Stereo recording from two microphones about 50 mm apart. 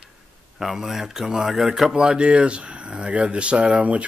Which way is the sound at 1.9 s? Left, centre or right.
Centre.